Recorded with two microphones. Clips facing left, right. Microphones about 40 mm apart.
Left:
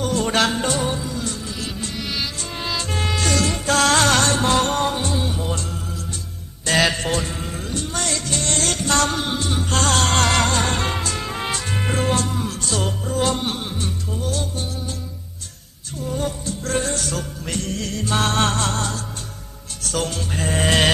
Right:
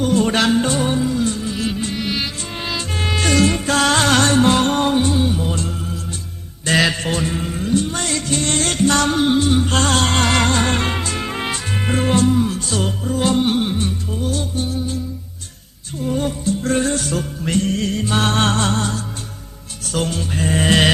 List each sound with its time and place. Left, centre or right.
0.0 s music: centre
3.2 s music: right; by 5.5 s centre
6.7 s music: centre
13.6 s music: right
16.0 s music: right; by 20.9 s centre